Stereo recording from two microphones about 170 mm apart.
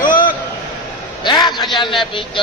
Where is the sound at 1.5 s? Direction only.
Centre (ahead or behind).